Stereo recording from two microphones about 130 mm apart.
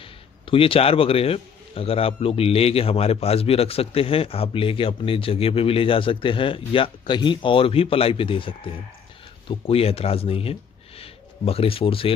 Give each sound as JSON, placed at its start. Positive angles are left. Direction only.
{"t": 0.0, "sound": "a man's voice", "side_deg": 45}